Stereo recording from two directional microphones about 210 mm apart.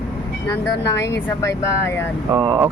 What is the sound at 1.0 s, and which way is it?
Speech, 15° left (ahead or behind).